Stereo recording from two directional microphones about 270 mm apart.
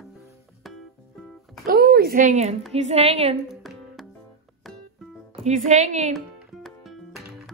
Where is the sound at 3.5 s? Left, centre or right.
Centre.